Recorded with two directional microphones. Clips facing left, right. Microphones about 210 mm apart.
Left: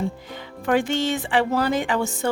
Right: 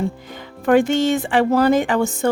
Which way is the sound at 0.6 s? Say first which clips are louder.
Right 6 dB; 50° right (ahead or behind).